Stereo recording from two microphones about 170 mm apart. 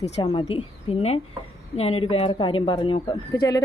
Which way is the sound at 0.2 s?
30° left (ahead or behind).